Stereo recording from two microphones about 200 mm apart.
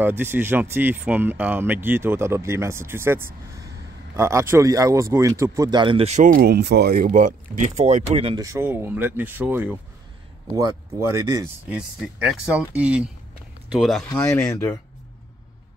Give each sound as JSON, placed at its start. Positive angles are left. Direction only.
{"t": 0.0, "sound": "a man's voice", "side_deg": -10}
{"t": 8.5, "sound": "speech", "side_deg": -10}
{"t": 12.0, "sound": "speech", "side_deg": -5}